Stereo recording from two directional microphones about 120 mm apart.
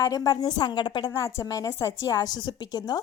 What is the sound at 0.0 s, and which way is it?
A woman's voice, 30° left (ahead or behind).